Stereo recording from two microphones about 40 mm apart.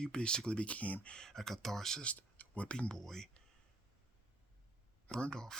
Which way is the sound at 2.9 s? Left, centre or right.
Centre.